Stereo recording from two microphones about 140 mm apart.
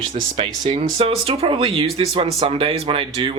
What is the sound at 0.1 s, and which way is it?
Speech, 40° right (ahead or behind).